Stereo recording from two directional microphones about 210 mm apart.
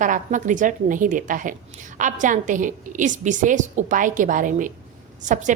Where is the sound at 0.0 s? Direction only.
40° right (ahead or behind).